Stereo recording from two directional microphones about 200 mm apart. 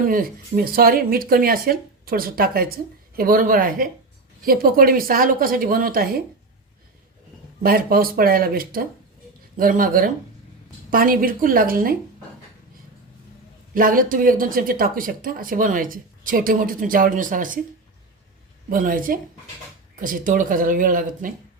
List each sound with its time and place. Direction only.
0.0 s speech: 45° right (ahead or behind)
7.6 s speech: 50° right (ahead or behind)
13.7 s speech: 45° right (ahead or behind)
18.7 s speech: 45° right (ahead or behind)